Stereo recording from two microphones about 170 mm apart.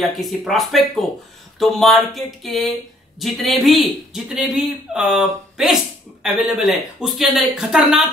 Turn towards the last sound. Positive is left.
turn(degrees=-5)  # may be behind; listen again after turning